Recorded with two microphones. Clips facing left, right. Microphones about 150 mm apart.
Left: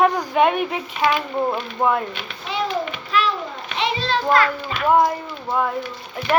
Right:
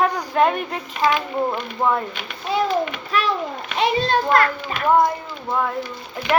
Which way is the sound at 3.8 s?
50° right (ahead or behind).